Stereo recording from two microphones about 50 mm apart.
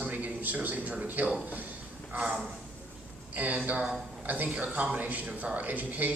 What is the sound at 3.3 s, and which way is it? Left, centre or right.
A man's voice, right.